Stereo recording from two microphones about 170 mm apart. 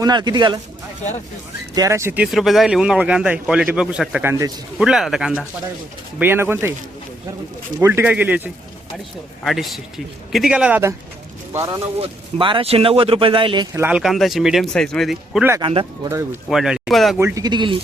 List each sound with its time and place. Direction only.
0.0 s speech: 25° right (ahead or behind)
1.7 s speech: 20° right (ahead or behind)
4.3 s speech: 20° right (ahead or behind)
4.8 s speech: centre (ahead or behind)
7.8 s speech: 15° right (ahead or behind)
9.4 s speech: centre (ahead or behind); by 11.8 s 20° right (ahead or behind)
11.9 s speech: 35° right (ahead or behind)
13.7 s speech: 10° right (ahead or behind)
15.6 s speech: 30° right (ahead or behind)
16.0 s speech: 15° right (ahead or behind)
16.5 s speech: 5° right (ahead or behind)
17.2 s speech: 20° right (ahead or behind)